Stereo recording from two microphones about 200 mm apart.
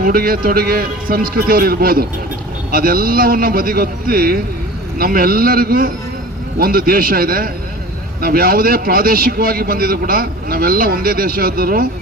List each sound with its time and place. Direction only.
0.0 s a man's voice: 45° right (ahead or behind)